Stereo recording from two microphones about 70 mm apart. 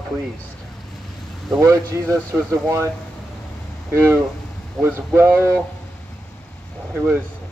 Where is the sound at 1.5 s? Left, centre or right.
Right.